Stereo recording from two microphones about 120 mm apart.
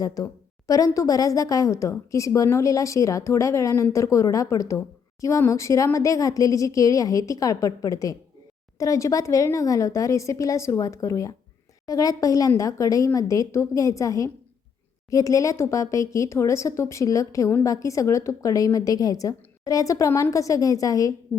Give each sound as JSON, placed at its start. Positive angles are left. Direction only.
{"t": 0.0, "sound": "a woman's voice", "side_deg": 30}